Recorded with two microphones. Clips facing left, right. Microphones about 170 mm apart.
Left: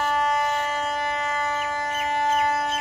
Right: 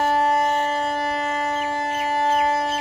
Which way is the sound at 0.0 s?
35° right (ahead or behind).